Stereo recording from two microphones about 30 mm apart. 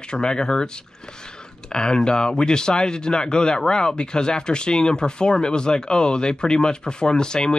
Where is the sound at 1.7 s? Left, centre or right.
Left.